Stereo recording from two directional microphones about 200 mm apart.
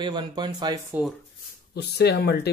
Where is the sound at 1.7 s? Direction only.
55° left (ahead or behind).